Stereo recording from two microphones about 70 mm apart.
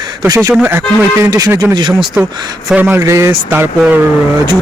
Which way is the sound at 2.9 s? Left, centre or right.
Right.